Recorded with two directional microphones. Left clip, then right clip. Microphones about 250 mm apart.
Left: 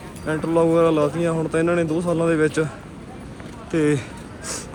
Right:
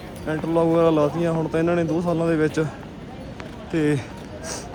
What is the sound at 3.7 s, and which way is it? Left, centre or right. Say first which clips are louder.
Speech: left 2 dB; centre.